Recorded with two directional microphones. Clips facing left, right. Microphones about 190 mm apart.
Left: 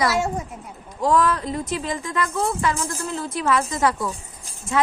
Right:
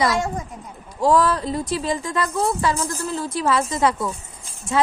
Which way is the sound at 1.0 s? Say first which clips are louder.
Right 2 dB; 30° right (ahead or behind).